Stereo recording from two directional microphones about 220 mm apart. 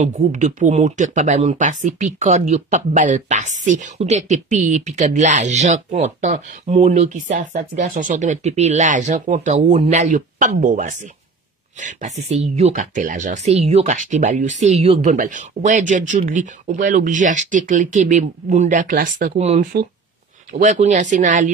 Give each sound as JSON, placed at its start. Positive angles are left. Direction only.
{"t": 0.0, "sound": "speech", "side_deg": -35}